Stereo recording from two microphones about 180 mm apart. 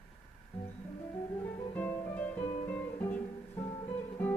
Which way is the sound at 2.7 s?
10° left (ahead or behind).